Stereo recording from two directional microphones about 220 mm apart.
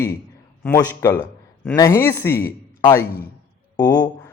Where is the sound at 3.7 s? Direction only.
15° left (ahead or behind).